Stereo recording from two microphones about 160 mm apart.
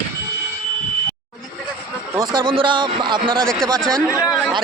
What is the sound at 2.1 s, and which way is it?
Speech, 25° right (ahead or behind).